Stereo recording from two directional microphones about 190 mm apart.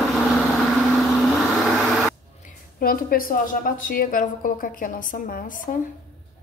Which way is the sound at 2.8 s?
50° left (ahead or behind).